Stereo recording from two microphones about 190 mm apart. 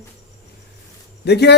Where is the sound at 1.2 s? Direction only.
60° left (ahead or behind).